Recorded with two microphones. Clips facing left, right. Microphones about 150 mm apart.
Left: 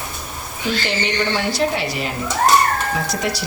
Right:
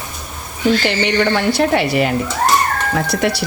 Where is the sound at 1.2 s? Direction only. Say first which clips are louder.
Right 4 dB; 60° right (ahead or behind).